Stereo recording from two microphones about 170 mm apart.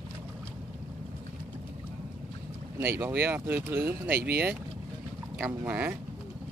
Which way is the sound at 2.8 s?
15° right (ahead or behind).